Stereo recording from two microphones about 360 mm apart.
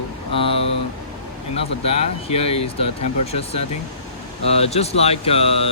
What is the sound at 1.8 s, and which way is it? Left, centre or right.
Speech, centre.